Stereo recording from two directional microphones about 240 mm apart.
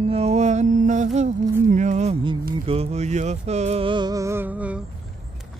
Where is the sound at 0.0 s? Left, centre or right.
Right.